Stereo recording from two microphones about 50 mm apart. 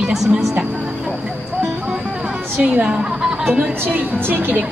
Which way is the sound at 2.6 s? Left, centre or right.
Right.